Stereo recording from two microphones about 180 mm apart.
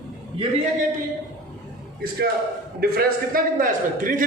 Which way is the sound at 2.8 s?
55° right (ahead or behind).